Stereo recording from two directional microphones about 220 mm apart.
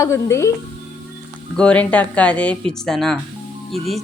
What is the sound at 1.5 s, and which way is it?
Speech, 5° left (ahead or behind).